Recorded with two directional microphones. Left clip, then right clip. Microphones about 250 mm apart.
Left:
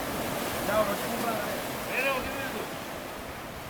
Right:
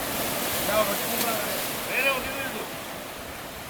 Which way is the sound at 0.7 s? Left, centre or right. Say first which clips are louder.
Right 2 dB; centre.